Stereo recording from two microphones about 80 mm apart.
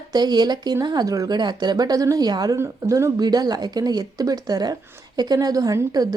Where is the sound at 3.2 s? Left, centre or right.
Right.